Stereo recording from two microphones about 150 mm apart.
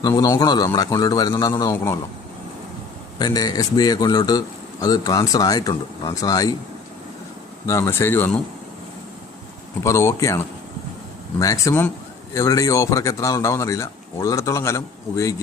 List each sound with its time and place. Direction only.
0.0 s a man's voice: 25° left (ahead or behind)
3.2 s a man's voice: 25° left (ahead or behind)
7.7 s speech: 15° left (ahead or behind)
9.8 s a man's voice: 20° left (ahead or behind)